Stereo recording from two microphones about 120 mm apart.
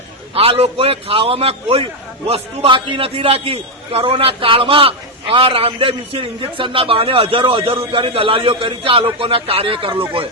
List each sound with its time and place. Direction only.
0.3 s a man's voice: 55° right (ahead or behind)